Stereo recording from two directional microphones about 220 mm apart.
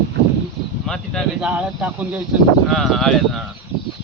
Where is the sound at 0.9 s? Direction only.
Centre (ahead or behind).